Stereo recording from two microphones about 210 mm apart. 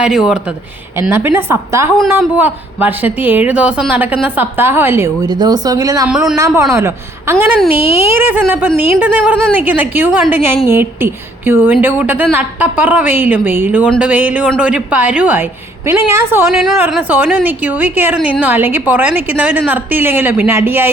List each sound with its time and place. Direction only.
0.0 s a woman's voice: centre (ahead or behind); by 6.1 s 15° right (ahead or behind)
6.1 s a woman's voice: 5° right (ahead or behind)
6.3 s a woman's voice: 15° right (ahead or behind)
7.8 s speech: 30° left (ahead or behind)
8.1 s a woman's voice: 10° right (ahead or behind)